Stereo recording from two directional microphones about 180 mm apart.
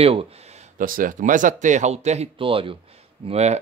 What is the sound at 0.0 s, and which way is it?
Speech, 30° right (ahead or behind).